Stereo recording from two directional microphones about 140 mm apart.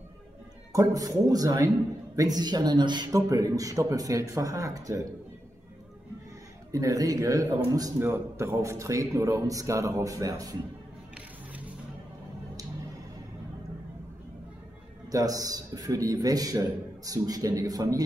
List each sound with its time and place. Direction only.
0.7 s a man's voice: 25° right (ahead or behind)
6.7 s a man's voice: 25° right (ahead or behind)
15.0 s a man's voice: 25° right (ahead or behind)